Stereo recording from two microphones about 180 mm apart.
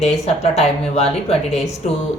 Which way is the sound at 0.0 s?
35° left (ahead or behind).